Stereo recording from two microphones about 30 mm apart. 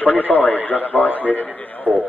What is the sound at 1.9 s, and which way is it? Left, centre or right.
Speech, right.